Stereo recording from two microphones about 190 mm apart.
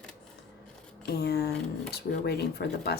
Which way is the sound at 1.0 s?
55° left (ahead or behind).